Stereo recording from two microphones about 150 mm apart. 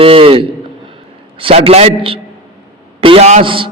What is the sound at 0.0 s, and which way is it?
A man's voice, 40° right (ahead or behind).